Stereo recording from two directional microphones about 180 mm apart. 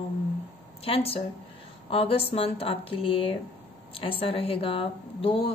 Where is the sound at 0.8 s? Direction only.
30° left (ahead or behind).